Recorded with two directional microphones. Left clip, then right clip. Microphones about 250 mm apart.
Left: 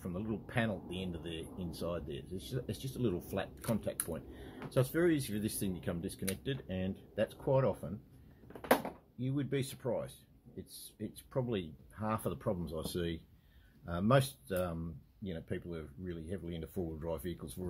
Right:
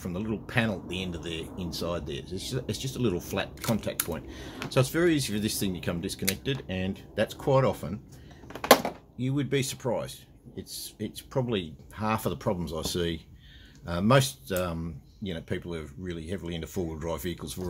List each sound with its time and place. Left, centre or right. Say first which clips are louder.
0.0 s speech: right 7 dB; centre
8.5 s a sound: right 11 dB; right
9.2 s speech: right 8 dB; centre